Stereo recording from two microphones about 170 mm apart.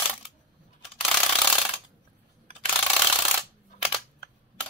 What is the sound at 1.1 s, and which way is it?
Ratchet, centre (ahead or behind).